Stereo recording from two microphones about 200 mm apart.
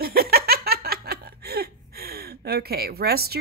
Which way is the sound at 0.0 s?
50° right (ahead or behind).